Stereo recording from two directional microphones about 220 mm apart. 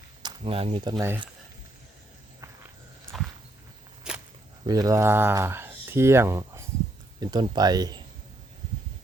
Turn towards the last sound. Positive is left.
turn(degrees=-20)  # may be behind; listen again after turning